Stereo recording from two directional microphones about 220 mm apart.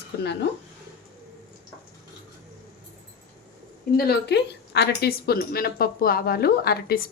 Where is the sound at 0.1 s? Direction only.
50° left (ahead or behind).